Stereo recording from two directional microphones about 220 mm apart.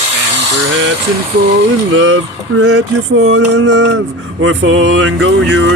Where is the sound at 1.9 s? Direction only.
60° right (ahead or behind).